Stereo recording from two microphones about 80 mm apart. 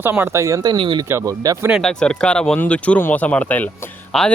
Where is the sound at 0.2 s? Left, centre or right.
Right.